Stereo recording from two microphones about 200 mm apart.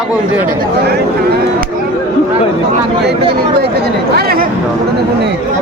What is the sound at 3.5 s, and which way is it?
Speech, 55° right (ahead or behind).